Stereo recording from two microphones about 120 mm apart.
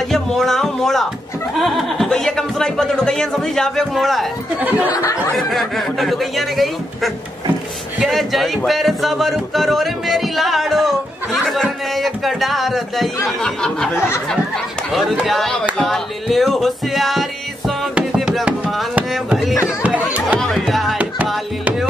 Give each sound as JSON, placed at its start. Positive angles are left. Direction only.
{"t": 0.1, "sound": "speech", "side_deg": 0}
{"t": 4.6, "sound": "speech", "side_deg": -10}
{"t": 5.3, "sound": "speech", "side_deg": 0}
{"t": 15.8, "sound": "music", "side_deg": 0}
{"t": 18.9, "sound": "a sound", "side_deg": -5}
{"t": 19.6, "sound": "music", "side_deg": -10}
{"t": 20.3, "sound": "music", "side_deg": 5}